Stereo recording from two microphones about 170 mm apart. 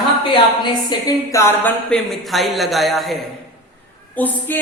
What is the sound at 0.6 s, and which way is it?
A woman's voice, 25° left (ahead or behind).